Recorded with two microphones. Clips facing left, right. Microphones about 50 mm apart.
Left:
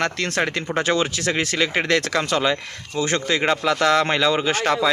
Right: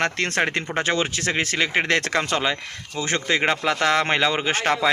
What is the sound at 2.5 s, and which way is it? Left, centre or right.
Speech, centre.